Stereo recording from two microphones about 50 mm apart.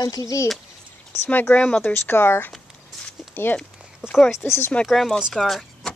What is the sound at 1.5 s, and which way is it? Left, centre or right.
Speech, left.